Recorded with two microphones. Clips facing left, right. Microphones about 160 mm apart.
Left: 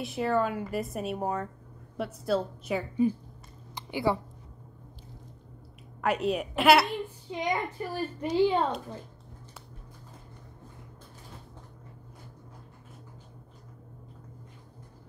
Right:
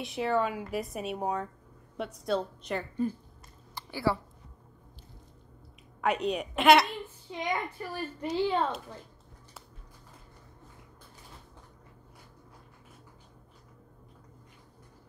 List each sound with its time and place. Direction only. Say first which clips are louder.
0.0 s a woman's voice: left 1 dB; centre (ahead or behind)
3.7 s a sound: left 2 dB; 20° left (ahead or behind)
5.9 s a woman's voice: left 1 dB; centre (ahead or behind)
7.2 s a child's voice: left 2 dB; 20° left (ahead or behind)